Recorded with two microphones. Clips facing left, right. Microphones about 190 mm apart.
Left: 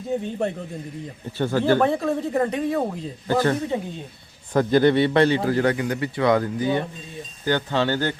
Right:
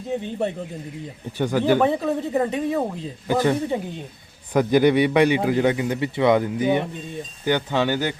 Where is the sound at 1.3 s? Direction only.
15° right (ahead or behind).